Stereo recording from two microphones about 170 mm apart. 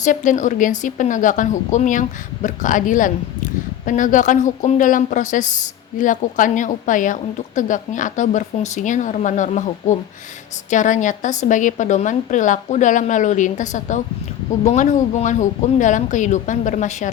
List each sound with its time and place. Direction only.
0.0 s speech: 50° left (ahead or behind)